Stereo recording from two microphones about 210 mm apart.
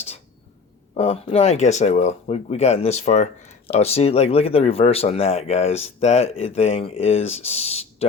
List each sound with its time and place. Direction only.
0.9 s speech: 30° left (ahead or behind)